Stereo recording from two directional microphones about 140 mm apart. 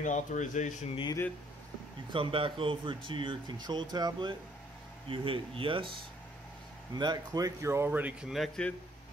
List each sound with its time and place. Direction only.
0.0 s speech: 60° left (ahead or behind)
2.1 s speech: 40° right (ahead or behind)
7.0 s speech: 30° right (ahead or behind); by 8.7 s 5° left (ahead or behind)